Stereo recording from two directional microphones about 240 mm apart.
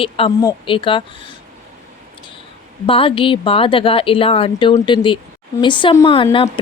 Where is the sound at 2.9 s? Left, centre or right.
Left.